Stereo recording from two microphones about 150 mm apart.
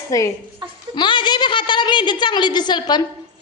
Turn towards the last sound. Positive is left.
turn(degrees=30)  # may be behind; listen again after turning